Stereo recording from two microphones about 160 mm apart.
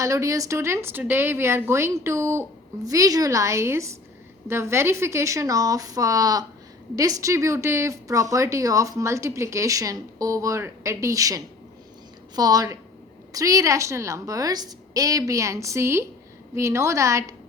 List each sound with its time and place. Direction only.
0.0 s a woman's voice: 20° right (ahead or behind)